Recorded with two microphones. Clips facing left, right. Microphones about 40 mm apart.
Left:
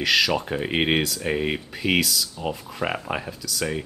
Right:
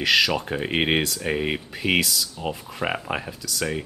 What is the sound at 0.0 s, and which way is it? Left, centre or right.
Speech, centre.